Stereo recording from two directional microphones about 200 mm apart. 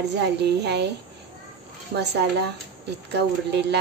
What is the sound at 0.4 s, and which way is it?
Speech, 55° right (ahead or behind).